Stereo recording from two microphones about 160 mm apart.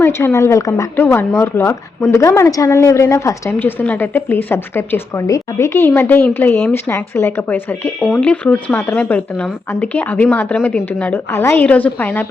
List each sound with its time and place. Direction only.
0.0 s speech: 15° left (ahead or behind)